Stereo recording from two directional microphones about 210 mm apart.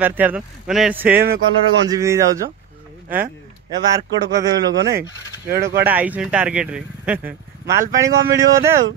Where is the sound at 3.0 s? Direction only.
45° right (ahead or behind).